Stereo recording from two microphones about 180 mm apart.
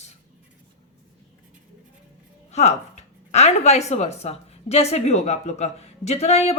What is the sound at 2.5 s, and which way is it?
Speech, 40° left (ahead or behind).